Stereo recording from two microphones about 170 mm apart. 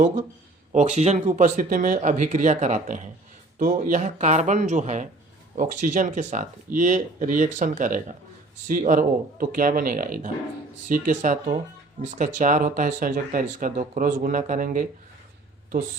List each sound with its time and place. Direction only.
0.7 s speech: 40° right (ahead or behind)